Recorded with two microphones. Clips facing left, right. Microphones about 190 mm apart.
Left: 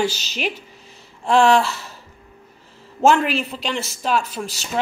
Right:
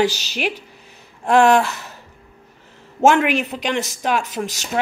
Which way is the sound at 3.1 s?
15° right (ahead or behind).